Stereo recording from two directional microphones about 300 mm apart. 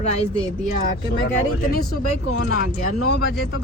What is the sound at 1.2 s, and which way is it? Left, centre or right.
Speech, left.